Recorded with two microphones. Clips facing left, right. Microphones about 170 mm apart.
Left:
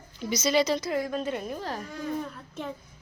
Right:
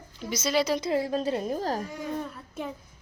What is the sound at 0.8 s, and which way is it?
A woman's voice, 30° right (ahead or behind).